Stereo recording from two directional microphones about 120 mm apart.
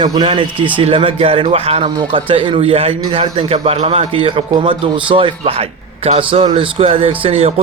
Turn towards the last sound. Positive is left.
turn(degrees=-55)  # may be behind; listen again after turning